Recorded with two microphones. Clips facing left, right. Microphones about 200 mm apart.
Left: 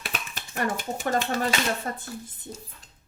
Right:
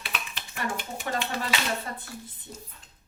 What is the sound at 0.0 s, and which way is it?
Speech, 45° left (ahead or behind).